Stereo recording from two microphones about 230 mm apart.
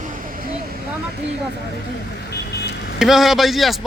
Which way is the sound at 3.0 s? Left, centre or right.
Centre.